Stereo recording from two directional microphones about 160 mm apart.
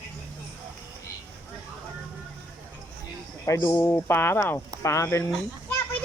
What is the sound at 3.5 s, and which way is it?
Speech, 15° left (ahead or behind).